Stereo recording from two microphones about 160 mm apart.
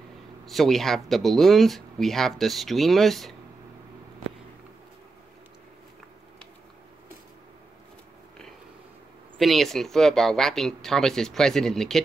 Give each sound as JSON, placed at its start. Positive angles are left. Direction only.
{"t": 0.5, "sound": "speech", "side_deg": 0}
{"t": 9.4, "sound": "speech", "side_deg": 0}